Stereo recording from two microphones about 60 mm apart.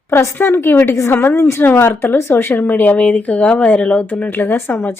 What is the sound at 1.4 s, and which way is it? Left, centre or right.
Speech, left.